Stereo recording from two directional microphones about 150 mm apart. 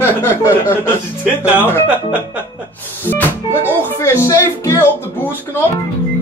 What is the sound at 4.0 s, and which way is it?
Speech, 20° left (ahead or behind).